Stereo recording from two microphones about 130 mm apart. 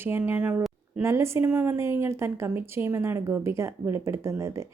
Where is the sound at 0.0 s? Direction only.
15° right (ahead or behind).